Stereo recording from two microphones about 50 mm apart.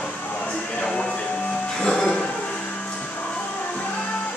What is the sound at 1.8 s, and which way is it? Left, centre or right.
Music, centre.